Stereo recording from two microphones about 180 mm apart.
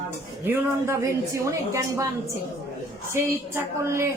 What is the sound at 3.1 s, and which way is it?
Speech, 15° right (ahead or behind).